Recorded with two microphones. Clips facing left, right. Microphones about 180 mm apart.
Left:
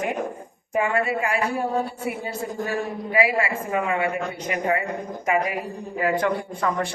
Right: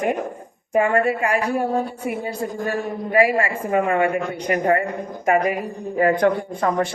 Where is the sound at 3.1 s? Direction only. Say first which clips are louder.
Right 4 dB; 45° right (ahead or behind).